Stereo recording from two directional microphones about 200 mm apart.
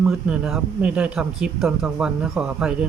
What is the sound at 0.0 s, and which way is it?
Speech, 5° right (ahead or behind).